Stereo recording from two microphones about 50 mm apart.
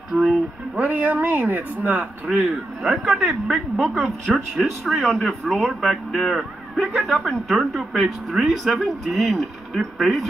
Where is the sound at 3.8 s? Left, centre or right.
Centre.